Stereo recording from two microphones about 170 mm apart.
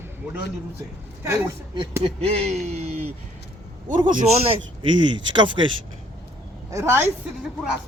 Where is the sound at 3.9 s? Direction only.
25° right (ahead or behind).